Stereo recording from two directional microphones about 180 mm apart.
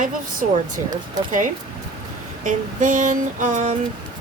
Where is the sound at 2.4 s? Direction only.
45° right (ahead or behind).